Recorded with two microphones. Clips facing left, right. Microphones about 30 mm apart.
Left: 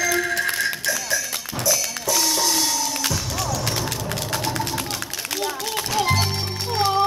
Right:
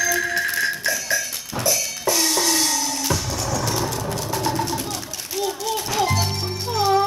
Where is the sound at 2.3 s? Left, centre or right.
Right.